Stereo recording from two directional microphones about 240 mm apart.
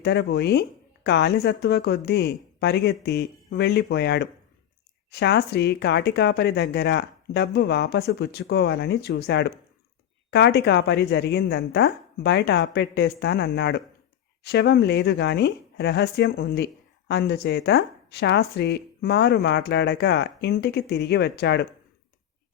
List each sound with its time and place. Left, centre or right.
0.0 s speech: left